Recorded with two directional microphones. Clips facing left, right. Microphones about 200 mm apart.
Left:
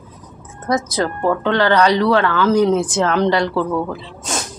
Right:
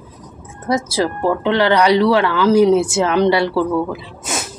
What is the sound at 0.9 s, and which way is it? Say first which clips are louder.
Speech: right 1 dB; 10° right (ahead or behind).